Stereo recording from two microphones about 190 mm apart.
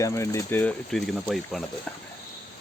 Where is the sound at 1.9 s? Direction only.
5° left (ahead or behind).